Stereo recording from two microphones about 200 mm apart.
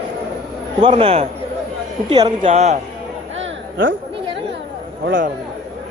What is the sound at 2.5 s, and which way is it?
Speech, 35° right (ahead or behind).